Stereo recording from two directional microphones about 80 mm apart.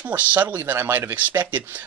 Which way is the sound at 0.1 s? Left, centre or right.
Right.